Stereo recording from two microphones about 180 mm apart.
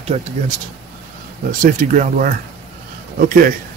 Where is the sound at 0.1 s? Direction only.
35° right (ahead or behind).